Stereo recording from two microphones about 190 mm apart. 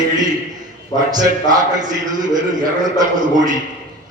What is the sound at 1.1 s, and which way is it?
Speech, 20° right (ahead or behind).